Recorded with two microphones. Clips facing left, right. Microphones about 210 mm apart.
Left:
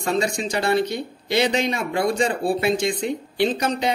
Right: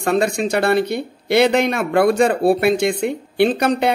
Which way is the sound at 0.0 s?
60° right (ahead or behind).